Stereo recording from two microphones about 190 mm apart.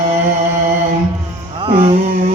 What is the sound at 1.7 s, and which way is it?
Music, 30° right (ahead or behind).